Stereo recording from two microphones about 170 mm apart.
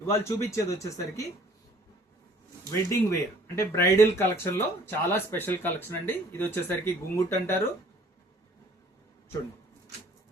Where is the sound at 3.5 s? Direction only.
15° left (ahead or behind).